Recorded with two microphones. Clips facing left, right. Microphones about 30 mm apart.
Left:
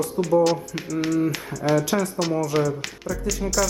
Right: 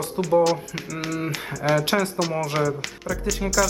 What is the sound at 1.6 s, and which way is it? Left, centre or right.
Speech, right.